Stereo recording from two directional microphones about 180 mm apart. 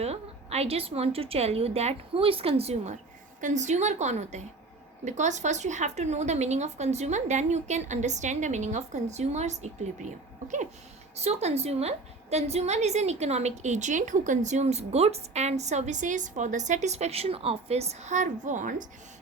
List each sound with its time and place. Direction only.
0.0 s a woman's voice: 35° right (ahead or behind)
11.2 s a woman's voice: 35° right (ahead or behind)